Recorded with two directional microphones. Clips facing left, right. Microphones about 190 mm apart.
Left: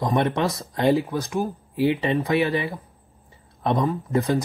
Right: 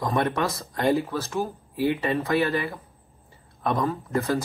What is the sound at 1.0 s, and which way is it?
Speech, 15° left (ahead or behind).